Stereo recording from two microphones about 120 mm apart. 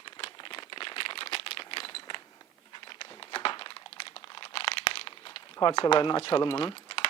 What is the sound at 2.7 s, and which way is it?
Crumpling, 45° left (ahead or behind).